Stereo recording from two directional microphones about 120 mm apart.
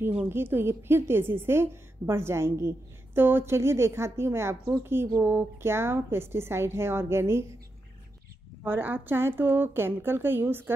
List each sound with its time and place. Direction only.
0.3 s a woman's voice: 20° right (ahead or behind)
8.6 s speech: 15° right (ahead or behind)